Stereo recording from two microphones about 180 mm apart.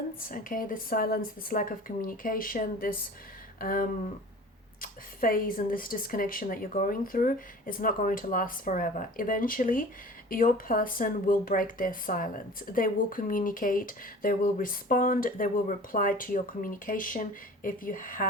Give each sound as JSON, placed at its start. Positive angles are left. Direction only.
{"t": 0.2, "sound": "speech", "side_deg": 50}